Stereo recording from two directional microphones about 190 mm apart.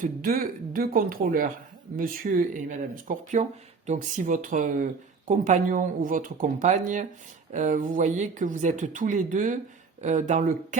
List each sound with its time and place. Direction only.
0.0 s speech: 50° right (ahead or behind)